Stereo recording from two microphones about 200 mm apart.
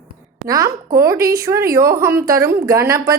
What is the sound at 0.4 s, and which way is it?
Speech, 15° right (ahead or behind).